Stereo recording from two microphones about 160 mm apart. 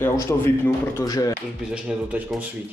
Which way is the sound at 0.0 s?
20° left (ahead or behind).